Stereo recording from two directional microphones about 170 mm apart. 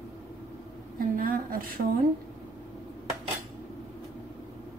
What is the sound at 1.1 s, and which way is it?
Speech, 55° right (ahead or behind).